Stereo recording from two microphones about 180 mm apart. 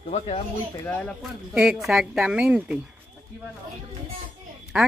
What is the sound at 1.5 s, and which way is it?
Speech, 5° right (ahead or behind).